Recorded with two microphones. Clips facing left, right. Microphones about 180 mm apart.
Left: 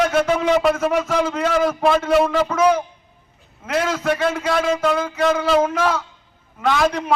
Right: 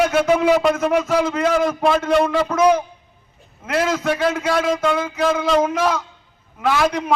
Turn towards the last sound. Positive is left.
turn(degrees=-10)  # may be behind; listen again after turning